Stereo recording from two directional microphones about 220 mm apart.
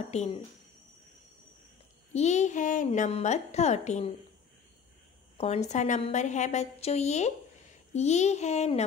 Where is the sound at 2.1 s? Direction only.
30° left (ahead or behind).